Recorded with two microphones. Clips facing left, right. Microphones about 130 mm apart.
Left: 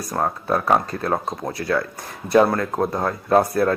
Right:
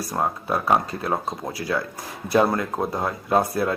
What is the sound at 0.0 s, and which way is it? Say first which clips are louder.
Speech: left 1 dB; 5° right (ahead or behind).